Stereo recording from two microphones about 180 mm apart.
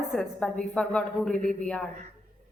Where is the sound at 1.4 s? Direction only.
50° right (ahead or behind).